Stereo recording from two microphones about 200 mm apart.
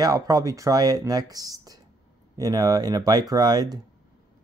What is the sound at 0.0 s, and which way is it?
Speech, 20° right (ahead or behind).